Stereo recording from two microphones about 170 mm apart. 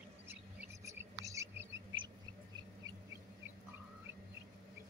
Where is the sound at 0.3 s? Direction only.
15° right (ahead or behind).